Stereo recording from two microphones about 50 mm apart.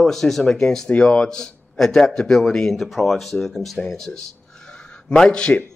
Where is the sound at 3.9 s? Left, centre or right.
Centre.